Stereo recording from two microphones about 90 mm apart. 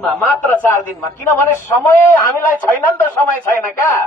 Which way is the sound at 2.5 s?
20° left (ahead or behind).